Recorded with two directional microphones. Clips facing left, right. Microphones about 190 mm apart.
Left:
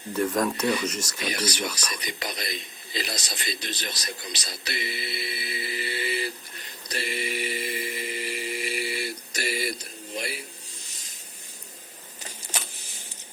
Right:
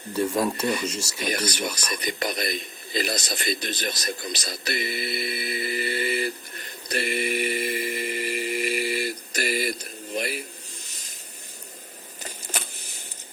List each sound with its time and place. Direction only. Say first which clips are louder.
0.1 s speech: right 1 dB; 10° right (ahead or behind)
1.3 s speech: right 2 dB; 50° right (ahead or behind)
2.0 s a sound: right 6 dB; 50° right (ahead or behind)